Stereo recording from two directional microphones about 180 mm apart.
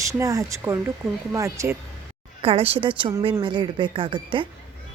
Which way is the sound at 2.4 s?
30° right (ahead or behind).